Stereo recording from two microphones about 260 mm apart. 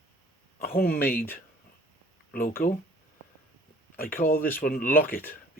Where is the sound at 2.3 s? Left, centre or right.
Left.